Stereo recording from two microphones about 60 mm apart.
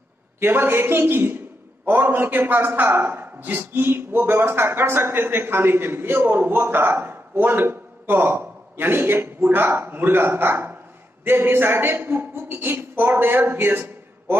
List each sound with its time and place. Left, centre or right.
0.4 s a man's voice: right